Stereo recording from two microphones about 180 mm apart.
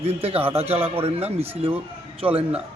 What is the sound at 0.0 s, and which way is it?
A man's voice, 35° right (ahead or behind).